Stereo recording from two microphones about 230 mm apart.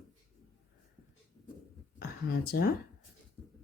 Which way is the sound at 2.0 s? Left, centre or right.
Left.